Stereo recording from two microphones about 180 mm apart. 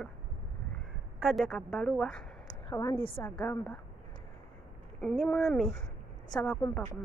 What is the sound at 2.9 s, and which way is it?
Speech, 30° left (ahead or behind).